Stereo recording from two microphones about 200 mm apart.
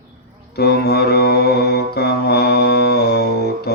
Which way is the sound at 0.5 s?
55° left (ahead or behind).